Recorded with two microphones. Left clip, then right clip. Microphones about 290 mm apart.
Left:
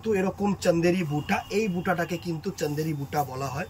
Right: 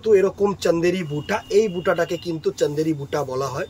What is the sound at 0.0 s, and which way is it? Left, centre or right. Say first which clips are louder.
Speech: right 10 dB; right.